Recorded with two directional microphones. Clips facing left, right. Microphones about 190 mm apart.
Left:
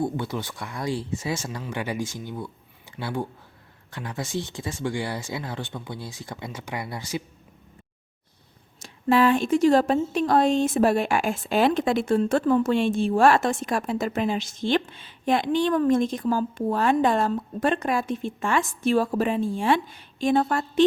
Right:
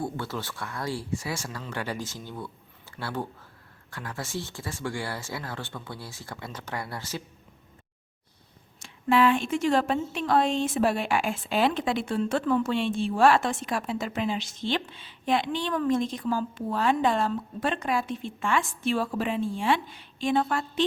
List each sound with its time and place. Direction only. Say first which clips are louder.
0.0 s speech: left 5 dB; 15° left (ahead or behind)
8.8 s speech: left 2 dB; 40° left (ahead or behind)